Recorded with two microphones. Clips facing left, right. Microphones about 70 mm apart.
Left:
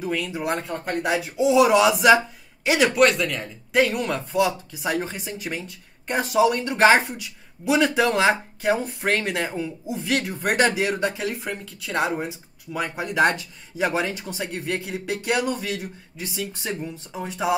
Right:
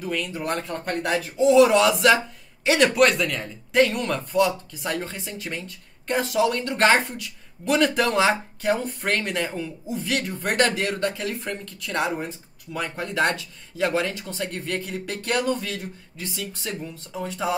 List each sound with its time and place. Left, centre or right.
0.1 s speech: centre